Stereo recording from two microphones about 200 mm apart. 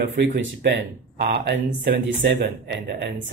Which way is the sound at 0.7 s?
60° right (ahead or behind).